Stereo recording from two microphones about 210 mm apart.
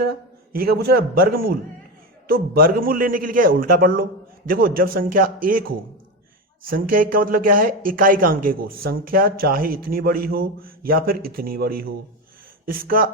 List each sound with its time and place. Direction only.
0.5 s speech: 45° right (ahead or behind)